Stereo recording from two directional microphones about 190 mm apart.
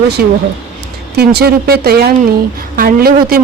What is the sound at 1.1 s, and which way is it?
Speech, 60° right (ahead or behind).